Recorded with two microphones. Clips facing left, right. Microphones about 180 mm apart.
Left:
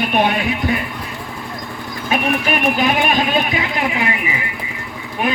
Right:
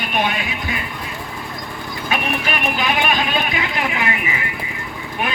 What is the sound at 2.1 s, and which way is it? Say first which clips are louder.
Speech: left 4 dB; 45° left (ahead or behind).